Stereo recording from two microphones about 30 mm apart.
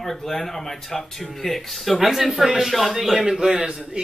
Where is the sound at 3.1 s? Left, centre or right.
Centre.